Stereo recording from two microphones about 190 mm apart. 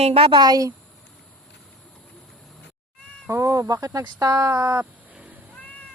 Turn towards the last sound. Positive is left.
turn(degrees=-10)  # may be behind; listen again after turning